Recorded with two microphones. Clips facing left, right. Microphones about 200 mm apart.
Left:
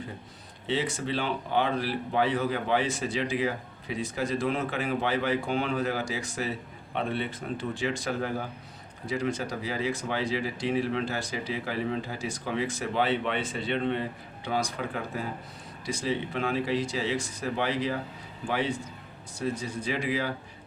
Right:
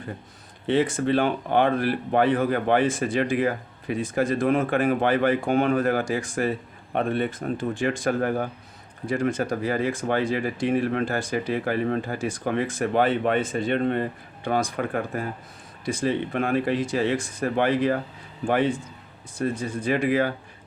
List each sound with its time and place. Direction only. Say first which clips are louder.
0.7 s speech: right 8 dB; 50° right (ahead or behind)